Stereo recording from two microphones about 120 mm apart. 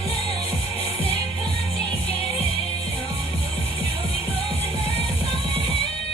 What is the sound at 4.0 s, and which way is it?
Music, 55° left (ahead or behind).